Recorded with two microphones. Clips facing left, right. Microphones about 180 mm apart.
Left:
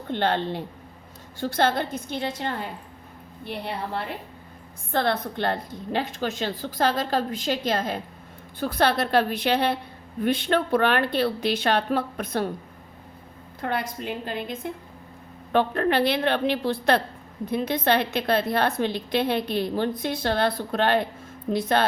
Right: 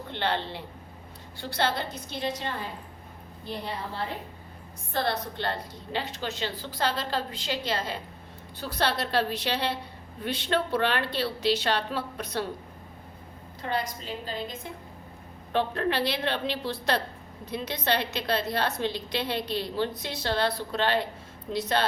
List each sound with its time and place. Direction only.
0.1 s a woman's voice: 50° left (ahead or behind)
3.4 s a woman's voice: 65° left (ahead or behind)
13.6 s a woman's voice: 55° left (ahead or behind)